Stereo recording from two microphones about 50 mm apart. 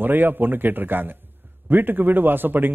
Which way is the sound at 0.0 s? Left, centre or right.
Right.